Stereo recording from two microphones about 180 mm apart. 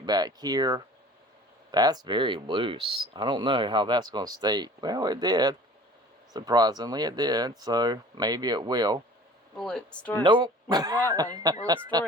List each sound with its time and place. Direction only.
0.0 s speech: 25° right (ahead or behind)
9.6 s speech: 5° left (ahead or behind)
10.2 s speech: 25° right (ahead or behind)